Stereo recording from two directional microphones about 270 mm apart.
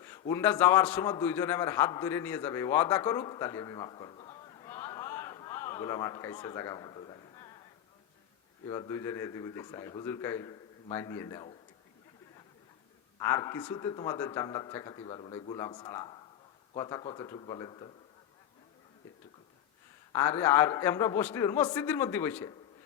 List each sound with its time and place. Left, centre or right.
0.0 s a man's voice: centre
8.6 s speech: centre
13.1 s speech: centre
20.1 s speech: centre